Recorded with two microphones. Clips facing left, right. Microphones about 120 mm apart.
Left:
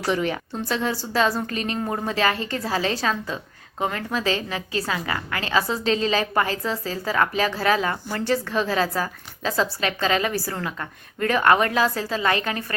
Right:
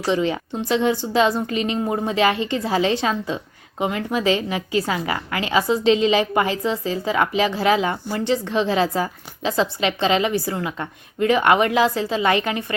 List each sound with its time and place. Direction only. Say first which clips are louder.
0.0 s a woman's voice: right 3 dB; 20° right (ahead or behind)